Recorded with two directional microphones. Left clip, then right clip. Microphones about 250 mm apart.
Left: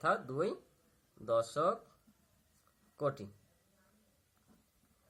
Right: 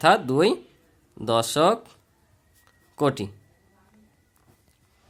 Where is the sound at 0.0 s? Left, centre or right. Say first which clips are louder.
Right 15 dB; right.